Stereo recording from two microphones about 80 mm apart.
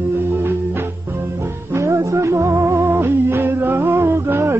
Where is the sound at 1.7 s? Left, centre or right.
Right.